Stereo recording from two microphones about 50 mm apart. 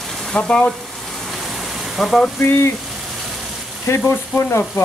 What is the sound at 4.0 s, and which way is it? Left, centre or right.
Frying, left.